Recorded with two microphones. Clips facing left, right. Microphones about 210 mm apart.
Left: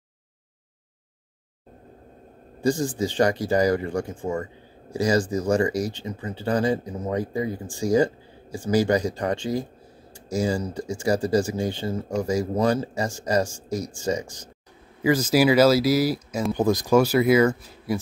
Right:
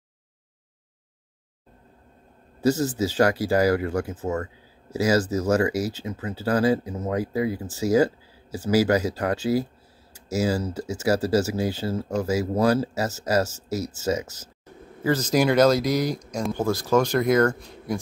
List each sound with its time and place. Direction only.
2.6 s speech: 5° right (ahead or behind)
15.0 s speech: 10° left (ahead or behind)
16.5 s speech: 15° left (ahead or behind)